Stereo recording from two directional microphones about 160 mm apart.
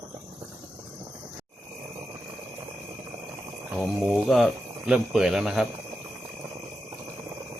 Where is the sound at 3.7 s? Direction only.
5° right (ahead or behind).